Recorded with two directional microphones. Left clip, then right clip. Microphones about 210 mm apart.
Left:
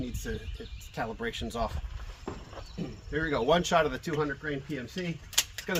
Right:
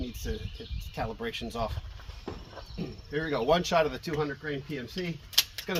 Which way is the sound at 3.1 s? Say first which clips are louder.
Even; 15° left (ahead or behind).